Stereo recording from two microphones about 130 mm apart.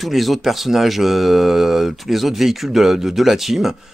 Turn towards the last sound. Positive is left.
turn(degrees=0)  # may be behind; listen again after turning